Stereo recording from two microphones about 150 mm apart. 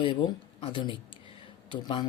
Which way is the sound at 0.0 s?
35° left (ahead or behind).